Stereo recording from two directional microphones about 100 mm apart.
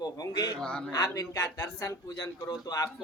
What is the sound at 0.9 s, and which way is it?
Speech, 35° left (ahead or behind).